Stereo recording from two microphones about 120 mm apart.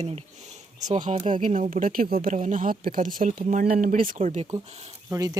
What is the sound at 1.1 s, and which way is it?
Speech, 55° right (ahead or behind).